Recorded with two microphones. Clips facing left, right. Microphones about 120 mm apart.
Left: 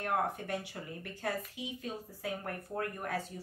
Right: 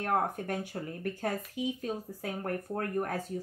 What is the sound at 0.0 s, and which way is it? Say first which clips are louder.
Speech: right 3 dB; 45° right (ahead or behind).